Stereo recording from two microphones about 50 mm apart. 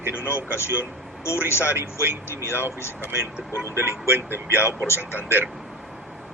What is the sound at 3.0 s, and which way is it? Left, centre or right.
Speech, right.